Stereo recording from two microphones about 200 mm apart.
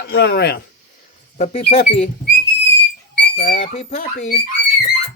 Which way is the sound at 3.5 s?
35° left (ahead or behind).